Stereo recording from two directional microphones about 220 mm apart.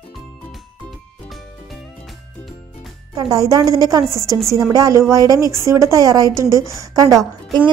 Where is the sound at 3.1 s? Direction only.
15° right (ahead or behind).